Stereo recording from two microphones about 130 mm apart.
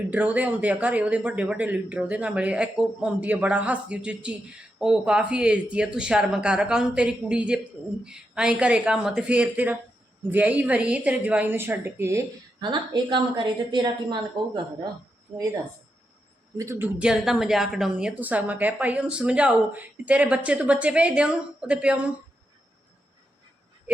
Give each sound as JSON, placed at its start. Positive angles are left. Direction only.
{"t": 0.1, "sound": "a woman's voice", "side_deg": -10}
{"t": 12.5, "sound": "a woman's voice", "side_deg": -35}
{"t": 16.6, "sound": "a woman's voice", "side_deg": -20}
{"t": 17.1, "sound": "a woman's voice", "side_deg": -5}